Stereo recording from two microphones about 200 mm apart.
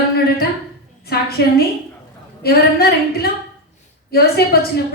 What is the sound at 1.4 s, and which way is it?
A woman's voice, 55° left (ahead or behind).